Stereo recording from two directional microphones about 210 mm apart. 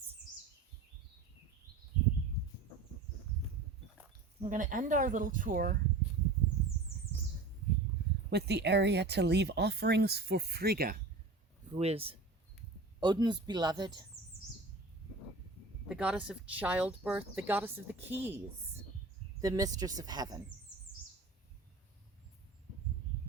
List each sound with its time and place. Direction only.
4.4 s speech: 40° right (ahead or behind)
8.3 s speech: 50° right (ahead or behind)
11.7 s speech: 30° right (ahead or behind)
15.9 s speech: 5° right (ahead or behind)